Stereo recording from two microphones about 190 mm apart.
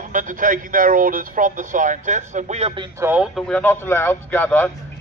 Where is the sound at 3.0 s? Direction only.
10° right (ahead or behind).